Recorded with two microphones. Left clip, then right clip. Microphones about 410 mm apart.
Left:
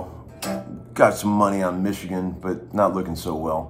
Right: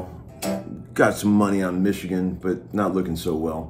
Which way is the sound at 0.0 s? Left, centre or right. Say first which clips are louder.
Right 1 dB; centre.